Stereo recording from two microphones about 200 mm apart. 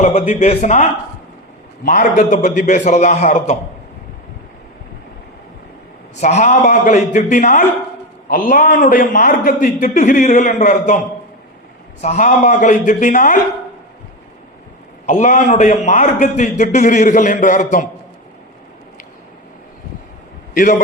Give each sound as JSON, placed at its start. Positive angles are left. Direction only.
{"t": 0.0, "sound": "a man's voice", "side_deg": 35}
{"t": 6.1, "sound": "a man's voice", "side_deg": 35}
{"t": 12.0, "sound": "a man's voice", "side_deg": 35}
{"t": 15.0, "sound": "a man's voice", "side_deg": 40}
{"t": 20.5, "sound": "a man's voice", "side_deg": 40}